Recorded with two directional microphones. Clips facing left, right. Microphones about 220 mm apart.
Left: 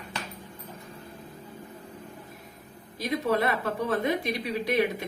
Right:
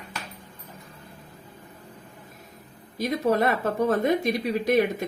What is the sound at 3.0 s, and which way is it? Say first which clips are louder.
Speech: right 3 dB; 45° right (ahead or behind).